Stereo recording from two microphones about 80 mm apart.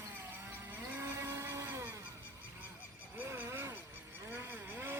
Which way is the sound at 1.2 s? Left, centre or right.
Right.